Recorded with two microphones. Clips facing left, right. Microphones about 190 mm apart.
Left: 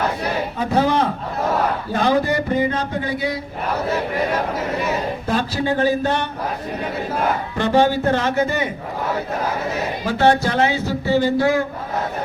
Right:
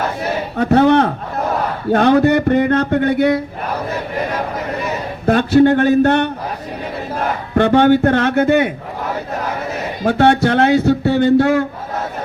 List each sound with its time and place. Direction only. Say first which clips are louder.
0.5 s a man's voice: right 8 dB; 65° right (ahead or behind)
5.2 s a man's voice: right 16 dB; 60° right (ahead or behind)
7.5 s a man's voice: right 7 dB; 60° right (ahead or behind)
10.1 s a man's voice: right 4 dB; 65° right (ahead or behind)